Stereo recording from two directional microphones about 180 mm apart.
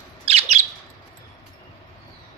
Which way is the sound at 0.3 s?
35° right (ahead or behind).